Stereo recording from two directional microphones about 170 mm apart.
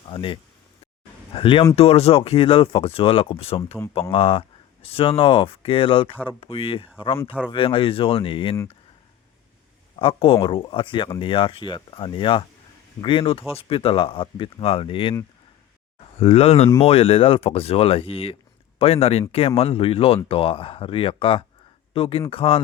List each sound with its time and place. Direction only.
0.1 s speech: 30° left (ahead or behind)
10.0 s speech: 30° left (ahead or behind)
16.2 s speech: 35° left (ahead or behind)